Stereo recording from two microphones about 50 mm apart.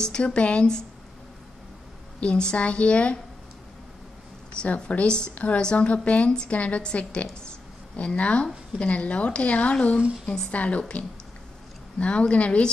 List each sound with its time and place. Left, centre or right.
0.0 s a woman's voice: centre
2.1 s a woman's voice: centre
4.7 s a woman's voice: left
10.5 s a woman's voice: left